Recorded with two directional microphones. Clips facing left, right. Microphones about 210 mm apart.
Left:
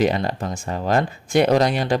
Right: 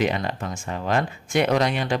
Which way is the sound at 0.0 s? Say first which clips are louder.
Left 4 dB; 35° left (ahead or behind).